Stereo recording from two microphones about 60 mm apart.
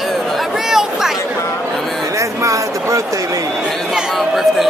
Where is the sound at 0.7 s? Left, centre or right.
Centre.